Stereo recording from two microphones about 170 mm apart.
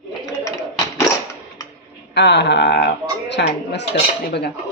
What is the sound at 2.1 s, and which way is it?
Speech, 90° left.